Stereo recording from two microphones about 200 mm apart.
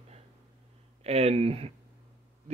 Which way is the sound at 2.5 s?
30° right (ahead or behind).